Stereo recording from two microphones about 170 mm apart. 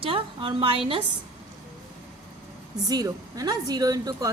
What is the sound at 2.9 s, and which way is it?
A woman's voice, 20° right (ahead or behind).